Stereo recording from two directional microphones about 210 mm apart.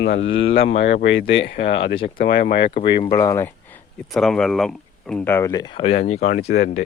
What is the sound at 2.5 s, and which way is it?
Speech, 45° left (ahead or behind).